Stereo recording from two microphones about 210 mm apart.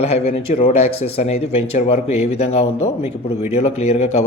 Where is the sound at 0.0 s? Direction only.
30° left (ahead or behind).